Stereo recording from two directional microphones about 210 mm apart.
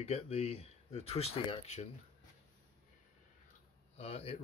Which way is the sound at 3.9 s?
30° left (ahead or behind).